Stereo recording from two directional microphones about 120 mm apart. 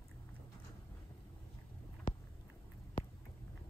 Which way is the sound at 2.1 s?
90° left.